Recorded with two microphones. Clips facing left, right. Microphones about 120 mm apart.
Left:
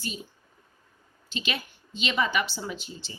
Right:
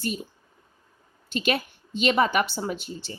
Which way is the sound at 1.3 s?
55° right (ahead or behind).